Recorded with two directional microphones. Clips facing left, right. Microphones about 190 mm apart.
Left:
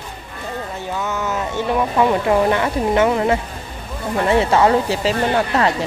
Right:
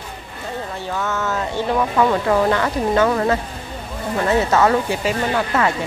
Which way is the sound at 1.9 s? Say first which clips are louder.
Left 2 dB; 15° left (ahead or behind).